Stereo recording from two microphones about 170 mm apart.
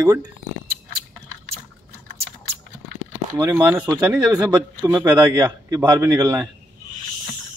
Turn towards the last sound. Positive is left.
turn(degrees=-20)  # may be behind; listen again after turning